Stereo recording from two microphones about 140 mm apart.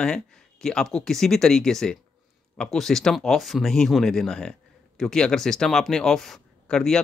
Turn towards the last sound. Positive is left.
turn(degrees=5)  # may be behind; listen again after turning